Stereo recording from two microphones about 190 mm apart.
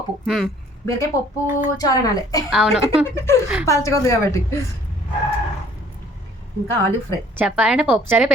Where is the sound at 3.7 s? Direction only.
15° left (ahead or behind).